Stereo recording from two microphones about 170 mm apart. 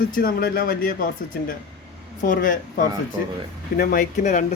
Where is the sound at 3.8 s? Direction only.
55° left (ahead or behind).